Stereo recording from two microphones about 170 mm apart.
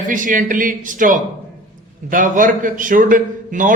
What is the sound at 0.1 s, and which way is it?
A man's voice, 50° right (ahead or behind).